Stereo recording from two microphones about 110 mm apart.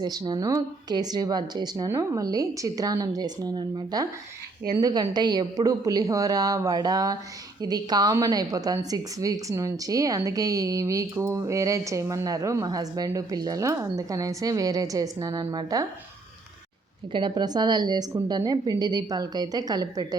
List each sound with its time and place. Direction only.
0.0 s a woman's voice: 40° right (ahead or behind)
1.9 s a woman's voice: 30° right (ahead or behind)
17.1 s a woman's voice: 45° right (ahead or behind)